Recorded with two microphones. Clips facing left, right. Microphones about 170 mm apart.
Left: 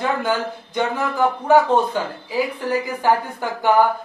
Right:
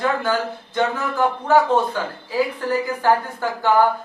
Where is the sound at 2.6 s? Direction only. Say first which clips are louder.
Even; 15° left (ahead or behind).